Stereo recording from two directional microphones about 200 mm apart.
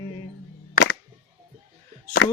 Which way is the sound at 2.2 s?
80° left.